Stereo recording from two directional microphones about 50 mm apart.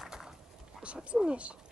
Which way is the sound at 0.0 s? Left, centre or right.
Centre.